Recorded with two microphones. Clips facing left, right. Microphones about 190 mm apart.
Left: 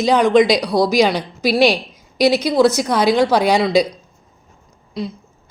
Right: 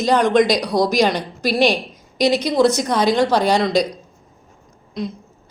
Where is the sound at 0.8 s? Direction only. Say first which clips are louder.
Left 2 dB; 5° left (ahead or behind).